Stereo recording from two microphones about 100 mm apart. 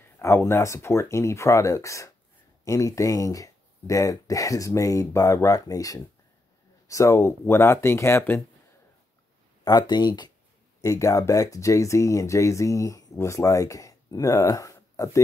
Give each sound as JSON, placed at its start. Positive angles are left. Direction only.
{"t": 0.2, "sound": "speech", "side_deg": 25}
{"t": 9.7, "sound": "speech", "side_deg": 45}
{"t": 10.8, "sound": "speech", "side_deg": 30}